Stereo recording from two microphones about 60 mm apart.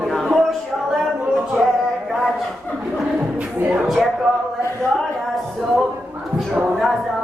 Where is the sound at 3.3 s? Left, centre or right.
Right.